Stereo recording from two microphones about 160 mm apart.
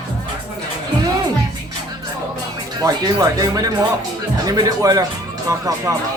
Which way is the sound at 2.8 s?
25° right (ahead or behind).